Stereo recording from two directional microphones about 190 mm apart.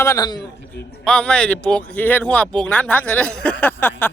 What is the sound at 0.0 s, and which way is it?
Speech, 15° left (ahead or behind).